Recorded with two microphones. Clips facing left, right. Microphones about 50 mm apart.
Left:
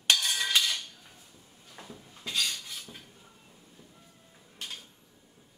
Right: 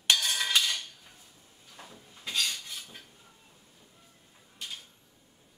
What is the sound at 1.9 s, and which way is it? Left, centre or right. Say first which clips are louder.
Dishes: even; centre.